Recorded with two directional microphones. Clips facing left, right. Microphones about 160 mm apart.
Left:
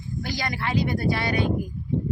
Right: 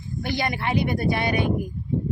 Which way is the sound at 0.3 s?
20° right (ahead or behind).